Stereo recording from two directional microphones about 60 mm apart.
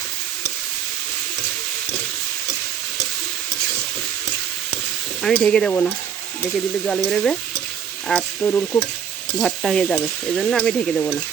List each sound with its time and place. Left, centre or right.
5.2 s speech: centre
7.0 s speech: centre
8.4 s stir: left
9.4 s stir: centre
10.3 s speech: centre